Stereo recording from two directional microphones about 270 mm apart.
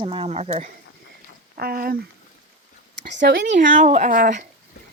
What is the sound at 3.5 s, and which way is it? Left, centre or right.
Speech, right.